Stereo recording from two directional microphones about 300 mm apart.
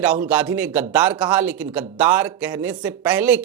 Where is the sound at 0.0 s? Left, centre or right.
Centre.